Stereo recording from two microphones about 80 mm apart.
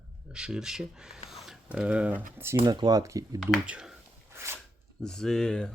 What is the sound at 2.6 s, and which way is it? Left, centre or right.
Speech, right.